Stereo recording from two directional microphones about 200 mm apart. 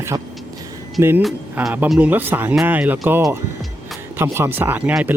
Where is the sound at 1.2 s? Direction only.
5° right (ahead or behind).